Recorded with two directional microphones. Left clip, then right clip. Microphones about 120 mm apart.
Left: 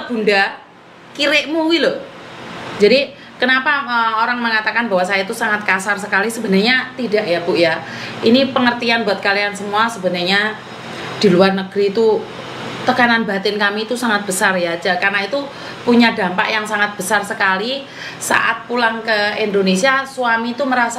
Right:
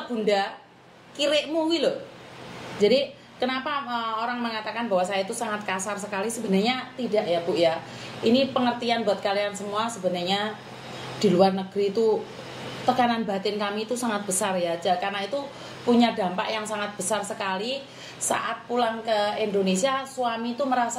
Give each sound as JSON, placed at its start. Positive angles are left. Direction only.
{"t": 0.2, "sound": "a woman's voice", "side_deg": 5}